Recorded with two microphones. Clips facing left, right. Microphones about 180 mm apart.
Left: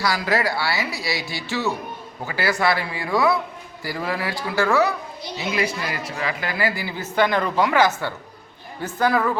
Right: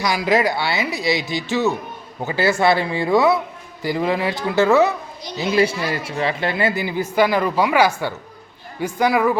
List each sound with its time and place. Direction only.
0.0 s a woman's voice: 20° right (ahead or behind)